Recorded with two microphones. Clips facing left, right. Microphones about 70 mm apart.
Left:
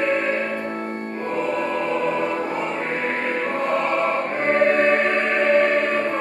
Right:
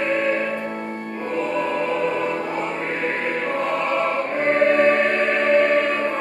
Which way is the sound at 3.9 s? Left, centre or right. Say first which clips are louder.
Even; left.